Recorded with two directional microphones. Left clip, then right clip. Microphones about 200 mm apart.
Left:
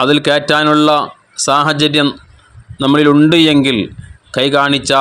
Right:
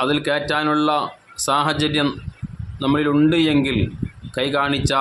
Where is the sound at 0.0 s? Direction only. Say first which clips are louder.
Left 8 dB; 30° left (ahead or behind).